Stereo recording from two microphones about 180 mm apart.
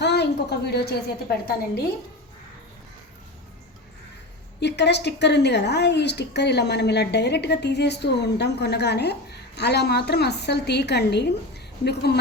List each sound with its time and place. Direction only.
0.0 s a woman's voice: 70° left (ahead or behind)
4.6 s a woman's voice: 70° left (ahead or behind)